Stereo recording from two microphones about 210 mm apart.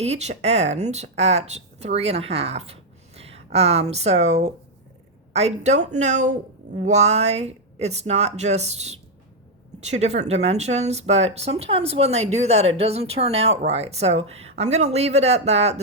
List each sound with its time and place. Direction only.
0.0 s speech: 30° right (ahead or behind)